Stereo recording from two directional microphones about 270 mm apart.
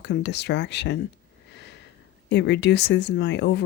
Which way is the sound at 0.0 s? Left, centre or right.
Left.